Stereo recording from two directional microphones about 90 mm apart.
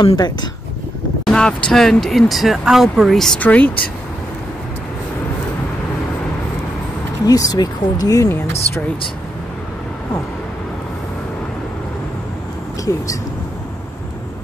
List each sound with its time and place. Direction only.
0.0 s speech: 55° left (ahead or behind)
1.2 s speech: 10° left (ahead or behind)
3.3 s speech: 20° left (ahead or behind)
7.2 s speech: 40° left (ahead or behind)